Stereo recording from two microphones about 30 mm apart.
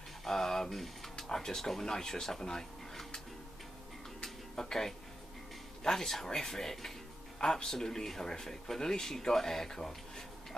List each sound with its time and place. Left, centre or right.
0.2 s a sound: centre
1.9 s speech: left
4.2 s tick-tock: centre
5.9 s speech: centre